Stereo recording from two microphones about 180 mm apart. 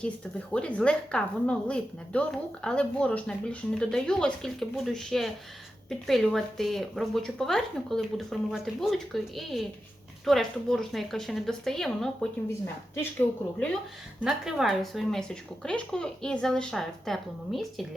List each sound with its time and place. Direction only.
0.0 s a woman's voice: 5° left (ahead or behind)
14.3 s a woman's voice: 5° right (ahead or behind)